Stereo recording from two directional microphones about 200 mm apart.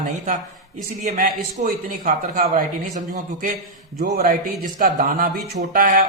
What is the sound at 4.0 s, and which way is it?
A man's voice, 45° right (ahead or behind).